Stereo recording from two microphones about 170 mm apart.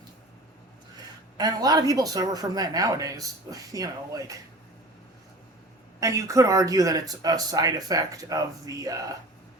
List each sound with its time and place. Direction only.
1.4 s speech: 20° right (ahead or behind)
6.0 s speech: 20° right (ahead or behind)